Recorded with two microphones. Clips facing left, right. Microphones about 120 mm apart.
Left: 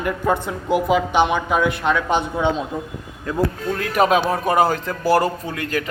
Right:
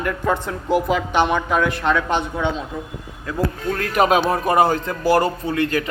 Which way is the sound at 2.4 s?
20° left (ahead or behind).